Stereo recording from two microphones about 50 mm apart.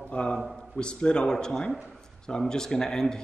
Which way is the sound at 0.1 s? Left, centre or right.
Left.